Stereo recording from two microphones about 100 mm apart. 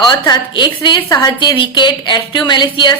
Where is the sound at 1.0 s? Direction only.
35° left (ahead or behind).